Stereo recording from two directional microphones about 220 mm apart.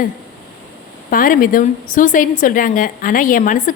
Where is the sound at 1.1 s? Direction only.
40° left (ahead or behind).